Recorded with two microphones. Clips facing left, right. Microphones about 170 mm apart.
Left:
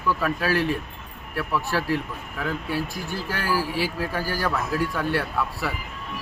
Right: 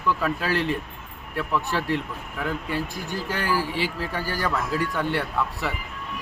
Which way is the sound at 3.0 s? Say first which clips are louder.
Right 1 dB; 15° right (ahead or behind).